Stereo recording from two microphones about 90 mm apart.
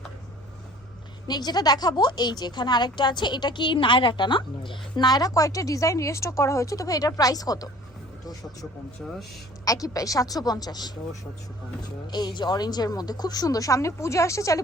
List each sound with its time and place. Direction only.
1.3 s a woman's voice: 50° left (ahead or behind); by 5.0 s 65° left (ahead or behind)
5.0 s a woman's voice: 45° left (ahead or behind)
9.0 s a woman's voice: centre (ahead or behind)
9.6 s a woman's voice: 40° left (ahead or behind)